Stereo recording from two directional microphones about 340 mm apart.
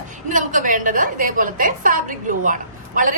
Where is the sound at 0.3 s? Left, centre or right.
Right.